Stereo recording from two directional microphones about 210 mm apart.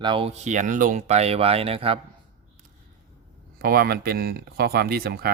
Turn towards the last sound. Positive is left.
turn(degrees=-50)  # may be behind; listen again after turning